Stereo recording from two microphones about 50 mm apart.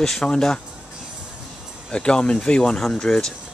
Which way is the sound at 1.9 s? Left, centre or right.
Centre.